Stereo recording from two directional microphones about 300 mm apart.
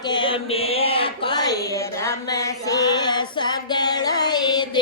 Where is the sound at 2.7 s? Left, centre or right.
Centre.